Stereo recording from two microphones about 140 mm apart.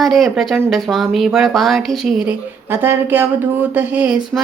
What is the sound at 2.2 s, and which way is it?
Speech, 15° right (ahead or behind).